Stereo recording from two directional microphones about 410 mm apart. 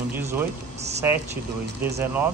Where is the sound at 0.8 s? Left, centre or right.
Centre.